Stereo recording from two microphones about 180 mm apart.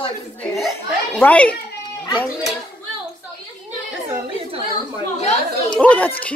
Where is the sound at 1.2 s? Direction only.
10° left (ahead or behind).